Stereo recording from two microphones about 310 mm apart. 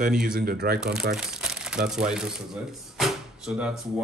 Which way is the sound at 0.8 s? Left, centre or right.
Centre.